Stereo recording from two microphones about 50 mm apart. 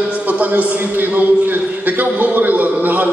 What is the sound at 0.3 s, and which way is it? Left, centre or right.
A man's voice, right.